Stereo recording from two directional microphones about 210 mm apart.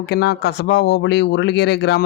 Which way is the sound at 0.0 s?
50° left (ahead or behind).